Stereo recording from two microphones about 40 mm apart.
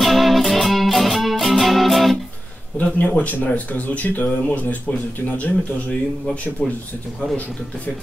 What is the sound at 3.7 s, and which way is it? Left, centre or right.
Speech, left.